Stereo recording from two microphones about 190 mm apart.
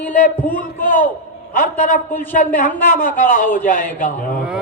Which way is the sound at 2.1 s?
10° left (ahead or behind).